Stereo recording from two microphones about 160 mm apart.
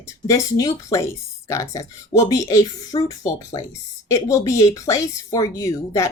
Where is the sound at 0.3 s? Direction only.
20° left (ahead or behind).